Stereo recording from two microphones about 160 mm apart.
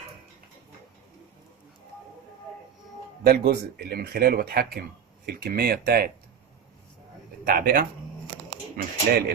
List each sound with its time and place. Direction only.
3.2 s speech: 85° right
7.4 s speech: 65° right (ahead or behind)
8.8 s speech: 75° right (ahead or behind)